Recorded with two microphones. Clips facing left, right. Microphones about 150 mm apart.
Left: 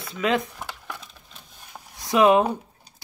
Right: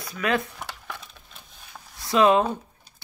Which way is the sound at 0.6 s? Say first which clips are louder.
Left 1 dB; centre (ahead or behind).